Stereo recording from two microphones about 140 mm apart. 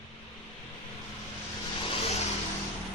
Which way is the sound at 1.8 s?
45° left (ahead or behind).